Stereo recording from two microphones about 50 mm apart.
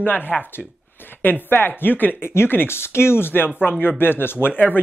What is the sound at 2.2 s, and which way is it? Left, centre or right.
Speech, left.